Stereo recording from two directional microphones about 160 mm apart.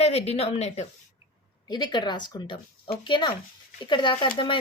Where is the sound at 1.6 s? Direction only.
25° left (ahead or behind).